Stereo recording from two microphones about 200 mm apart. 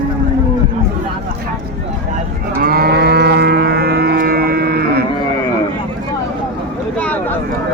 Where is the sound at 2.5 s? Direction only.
45° right (ahead or behind).